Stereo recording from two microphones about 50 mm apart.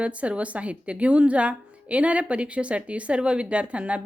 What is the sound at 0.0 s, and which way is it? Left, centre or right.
A woman's voice, right.